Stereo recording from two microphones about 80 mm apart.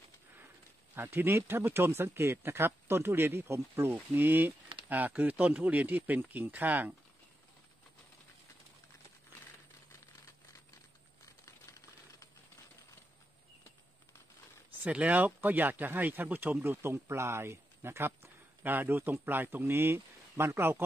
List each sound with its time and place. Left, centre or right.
0.9 s speech: right
14.8 s speech: centre